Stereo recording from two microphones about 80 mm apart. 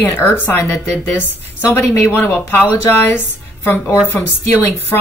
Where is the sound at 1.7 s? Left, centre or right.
Left.